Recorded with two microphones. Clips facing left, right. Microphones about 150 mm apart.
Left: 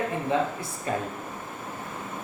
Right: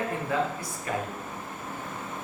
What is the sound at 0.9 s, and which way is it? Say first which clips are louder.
Speech: left 2 dB; 30° left (ahead or behind).